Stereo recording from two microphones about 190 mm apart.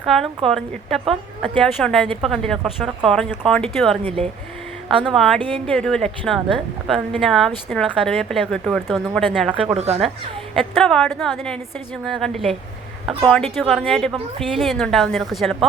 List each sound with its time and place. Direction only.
0.0 s a woman's voice: centre (ahead or behind)
9.7 s speech: 35° right (ahead or behind)
10.5 s a woman's voice: centre (ahead or behind)